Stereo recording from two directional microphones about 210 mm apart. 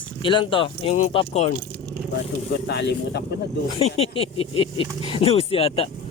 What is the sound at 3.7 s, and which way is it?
Speech, 30° left (ahead or behind).